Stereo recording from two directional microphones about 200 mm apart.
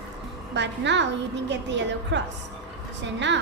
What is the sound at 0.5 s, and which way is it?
A woman's voice, 60° right (ahead or behind).